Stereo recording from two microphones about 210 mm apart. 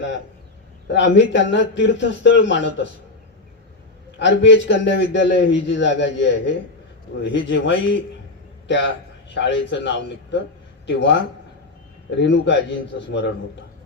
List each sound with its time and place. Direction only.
0.9 s speech: 60° left (ahead or behind)
4.2 s a man's voice: 60° left (ahead or behind)